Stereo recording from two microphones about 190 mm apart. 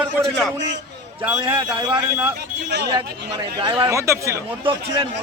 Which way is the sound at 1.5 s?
25° right (ahead or behind).